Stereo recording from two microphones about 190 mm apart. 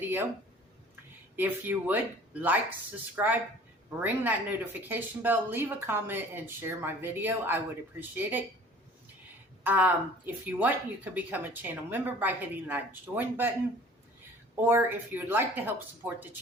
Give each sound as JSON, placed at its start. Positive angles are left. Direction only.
{"t": 0.0, "sound": "speech", "side_deg": -10}
{"t": 1.4, "sound": "speech", "side_deg": -10}
{"t": 3.2, "sound": "speech", "side_deg": -10}
{"t": 9.6, "sound": "speech", "side_deg": -10}
{"t": 14.5, "sound": "speech", "side_deg": -10}